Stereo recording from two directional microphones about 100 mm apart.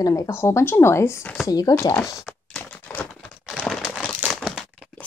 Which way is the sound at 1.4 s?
40° left (ahead or behind).